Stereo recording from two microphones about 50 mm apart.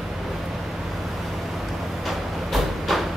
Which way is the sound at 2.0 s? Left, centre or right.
Centre.